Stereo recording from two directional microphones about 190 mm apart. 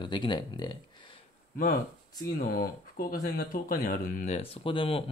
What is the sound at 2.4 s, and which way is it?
Speech, 50° left (ahead or behind).